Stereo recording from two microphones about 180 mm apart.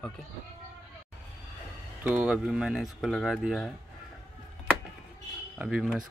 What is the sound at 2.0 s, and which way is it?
Speech, 5° right (ahead or behind).